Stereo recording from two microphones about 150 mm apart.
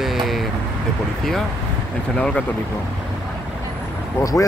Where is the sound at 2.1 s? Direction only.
10° left (ahead or behind).